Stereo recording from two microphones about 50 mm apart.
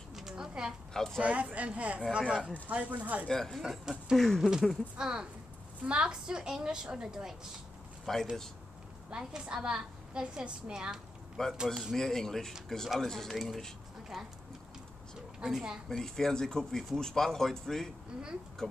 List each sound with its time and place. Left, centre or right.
0.1 s a sound: centre
0.9 s speech: centre
1.2 s speech: right
3.3 s speech: centre
3.8 s a woman's voice: centre
8.0 s speech: centre
9.2 s a woman's voice: centre
11.9 s speech: centre
15.4 s a woman's voice: centre
16.0 s speech: centre